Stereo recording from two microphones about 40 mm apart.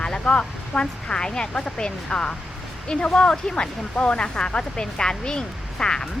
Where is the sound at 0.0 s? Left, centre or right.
Left.